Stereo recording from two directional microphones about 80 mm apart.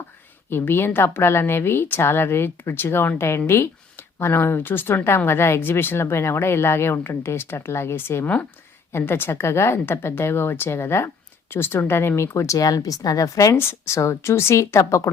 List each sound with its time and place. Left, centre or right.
0.5 s a woman's voice: left
13.6 s a woman's voice: left